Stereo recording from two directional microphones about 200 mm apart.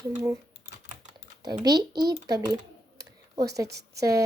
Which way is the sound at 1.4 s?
20° right (ahead or behind).